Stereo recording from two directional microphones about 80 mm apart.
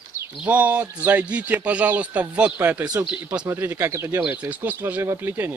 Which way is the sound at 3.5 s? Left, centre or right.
Right.